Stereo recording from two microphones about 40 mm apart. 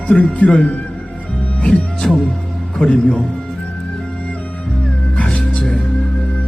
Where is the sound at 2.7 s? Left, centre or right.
Centre.